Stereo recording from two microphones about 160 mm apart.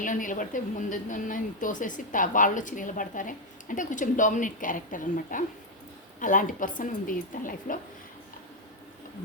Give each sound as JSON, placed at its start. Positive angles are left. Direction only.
{"t": 0.0, "sound": "a woman's voice", "side_deg": 55}